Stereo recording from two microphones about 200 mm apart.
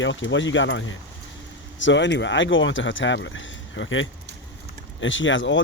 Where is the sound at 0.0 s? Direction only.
70° left (ahead or behind).